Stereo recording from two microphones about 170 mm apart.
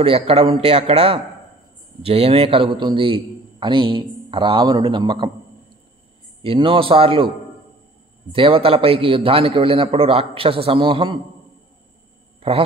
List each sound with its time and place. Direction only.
0.0 s a man's voice: 35° right (ahead or behind)
6.4 s a man's voice: 30° right (ahead or behind)
12.4 s speech: 35° right (ahead or behind)